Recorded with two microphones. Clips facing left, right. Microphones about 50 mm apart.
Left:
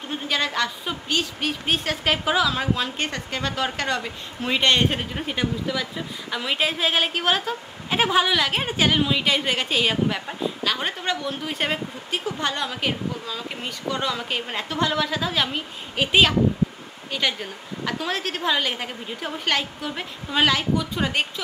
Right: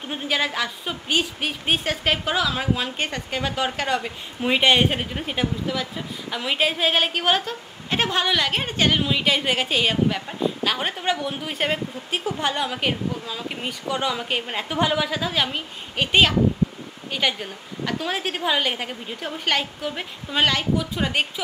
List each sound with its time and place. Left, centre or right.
0.1 s speech: centre
11.5 s speech: centre
15.0 s speech: centre